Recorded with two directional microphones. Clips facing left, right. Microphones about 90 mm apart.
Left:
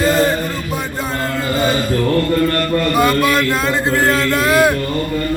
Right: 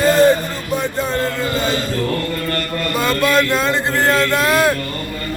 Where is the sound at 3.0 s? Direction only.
10° left (ahead or behind).